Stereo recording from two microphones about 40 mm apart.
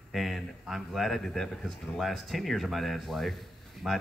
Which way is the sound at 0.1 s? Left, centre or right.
Centre.